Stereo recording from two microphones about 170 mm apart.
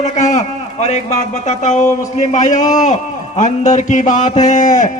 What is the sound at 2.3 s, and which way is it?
Speech, 45° left (ahead or behind).